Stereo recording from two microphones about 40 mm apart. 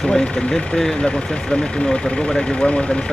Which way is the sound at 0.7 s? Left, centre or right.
Centre.